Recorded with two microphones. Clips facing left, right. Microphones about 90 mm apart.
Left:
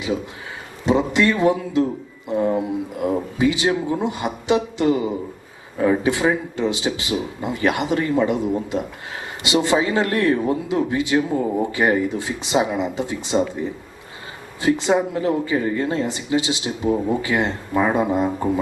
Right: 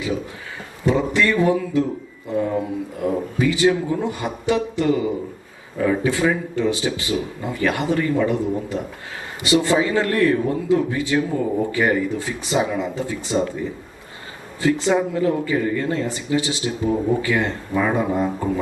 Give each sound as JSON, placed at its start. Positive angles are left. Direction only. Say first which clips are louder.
{"t": 0.9, "sound": "speech", "louder": "left 1 dB", "side_deg": 20}
{"t": 14.6, "sound": "speech", "louder": "even", "side_deg": 20}